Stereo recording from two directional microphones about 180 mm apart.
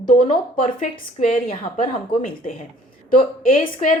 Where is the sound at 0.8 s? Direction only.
50° left (ahead or behind).